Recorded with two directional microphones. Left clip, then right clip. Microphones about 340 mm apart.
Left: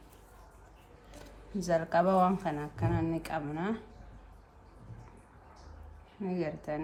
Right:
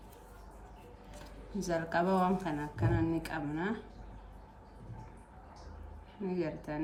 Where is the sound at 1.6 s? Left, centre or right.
Centre.